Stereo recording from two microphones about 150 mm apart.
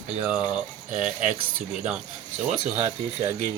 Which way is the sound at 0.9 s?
55° right (ahead or behind).